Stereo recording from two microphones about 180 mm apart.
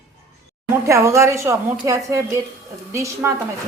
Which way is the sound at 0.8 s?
15° right (ahead or behind).